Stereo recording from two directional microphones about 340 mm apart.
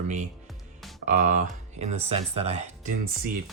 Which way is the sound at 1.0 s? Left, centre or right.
Right.